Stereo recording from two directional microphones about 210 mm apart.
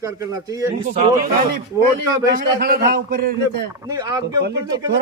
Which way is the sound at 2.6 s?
45° right (ahead or behind).